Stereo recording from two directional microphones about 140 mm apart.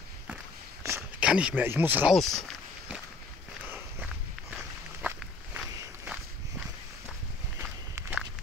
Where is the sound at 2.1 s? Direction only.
Centre (ahead or behind).